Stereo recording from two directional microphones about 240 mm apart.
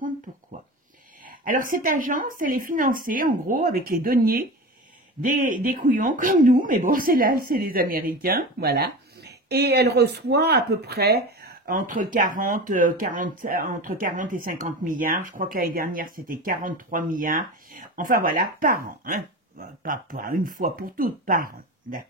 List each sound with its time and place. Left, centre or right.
1.4 s speech: right